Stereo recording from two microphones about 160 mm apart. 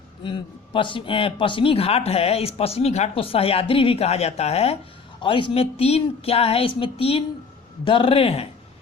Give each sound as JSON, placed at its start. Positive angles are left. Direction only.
{"t": 0.2, "sound": "speech", "side_deg": 30}